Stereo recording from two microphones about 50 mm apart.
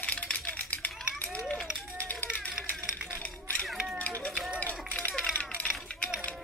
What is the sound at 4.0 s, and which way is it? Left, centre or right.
Run, left.